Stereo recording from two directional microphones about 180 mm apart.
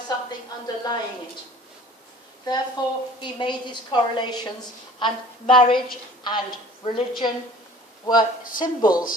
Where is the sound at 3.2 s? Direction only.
25° left (ahead or behind).